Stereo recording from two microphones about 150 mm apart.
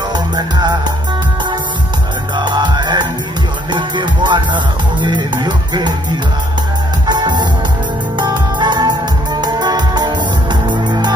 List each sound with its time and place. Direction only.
0.1 s music: 30° right (ahead or behind)
2.3 s music: 30° right (ahead or behind)
7.1 s music: 30° right (ahead or behind)